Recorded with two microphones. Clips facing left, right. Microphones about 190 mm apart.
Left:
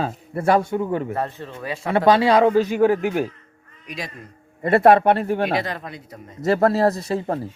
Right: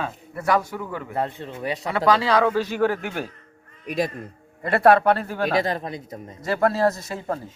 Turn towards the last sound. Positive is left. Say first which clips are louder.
# left 4 dB
turn(degrees=30)  # may be behind; listen again after turning